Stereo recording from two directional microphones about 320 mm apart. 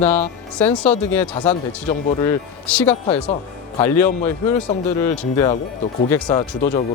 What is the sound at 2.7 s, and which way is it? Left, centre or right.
Speech, centre.